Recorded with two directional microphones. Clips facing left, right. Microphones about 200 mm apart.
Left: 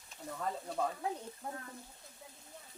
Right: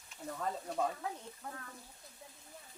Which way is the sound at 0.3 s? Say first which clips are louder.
Even; centre (ahead or behind).